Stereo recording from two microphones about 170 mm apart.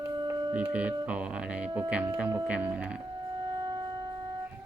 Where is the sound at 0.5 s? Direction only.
10° right (ahead or behind).